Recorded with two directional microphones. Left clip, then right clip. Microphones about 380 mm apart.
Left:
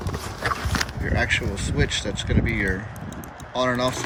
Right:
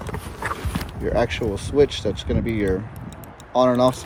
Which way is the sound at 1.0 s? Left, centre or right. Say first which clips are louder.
Right 4 dB; centre.